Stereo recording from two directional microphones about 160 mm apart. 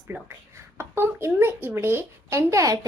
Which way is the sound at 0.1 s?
15° right (ahead or behind).